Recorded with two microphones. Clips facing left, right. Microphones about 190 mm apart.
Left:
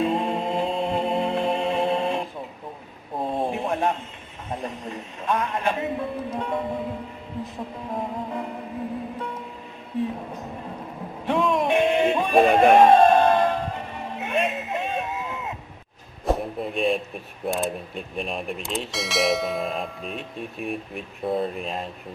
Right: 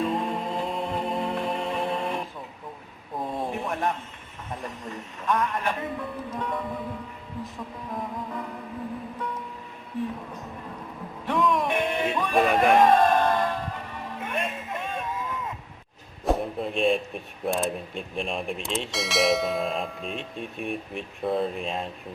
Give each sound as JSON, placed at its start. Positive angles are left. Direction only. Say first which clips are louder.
{"t": 0.0, "sound": "music", "louder": "left 3 dB", "side_deg": 25}
{"t": 3.2, "sound": "a sound", "louder": "left 4 dB", "side_deg": 25}
{"t": 4.6, "sound": "speech", "louder": "left 3 dB", "side_deg": 25}
{"t": 7.9, "sound": "speech", "louder": "left 4 dB", "side_deg": 25}
{"t": 11.3, "sound": "music", "louder": "left 3 dB", "side_deg": 25}
{"t": 16.2, "sound": "a sound", "louder": "left 1 dB", "side_deg": 0}
{"t": 17.4, "sound": "speech", "louder": "left 1 dB", "side_deg": 0}